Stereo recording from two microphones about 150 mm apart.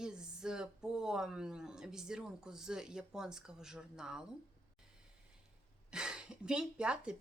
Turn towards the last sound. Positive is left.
turn(degrees=-5)  # may be behind; listen again after turning